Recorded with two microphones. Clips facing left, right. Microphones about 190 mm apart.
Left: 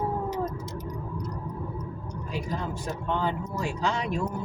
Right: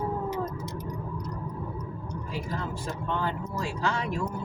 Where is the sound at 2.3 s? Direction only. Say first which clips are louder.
Left 2 dB; 15° left (ahead or behind).